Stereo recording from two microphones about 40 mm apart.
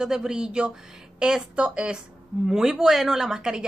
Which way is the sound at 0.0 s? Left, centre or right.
Centre.